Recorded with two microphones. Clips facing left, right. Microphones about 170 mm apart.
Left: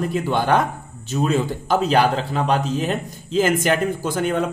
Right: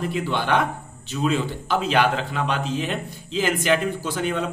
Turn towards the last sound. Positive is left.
turn(degrees=50)  # may be behind; listen again after turning